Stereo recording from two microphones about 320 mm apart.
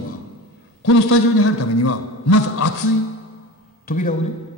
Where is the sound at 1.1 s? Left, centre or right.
Left.